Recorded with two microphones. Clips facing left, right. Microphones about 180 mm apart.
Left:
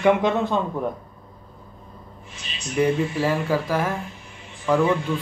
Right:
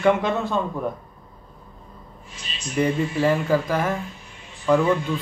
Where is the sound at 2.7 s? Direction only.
5° left (ahead or behind).